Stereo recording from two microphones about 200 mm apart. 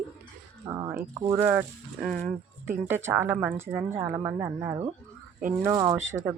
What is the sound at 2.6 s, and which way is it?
Speech, 10° right (ahead or behind).